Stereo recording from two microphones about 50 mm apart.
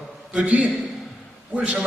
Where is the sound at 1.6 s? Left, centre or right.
Centre.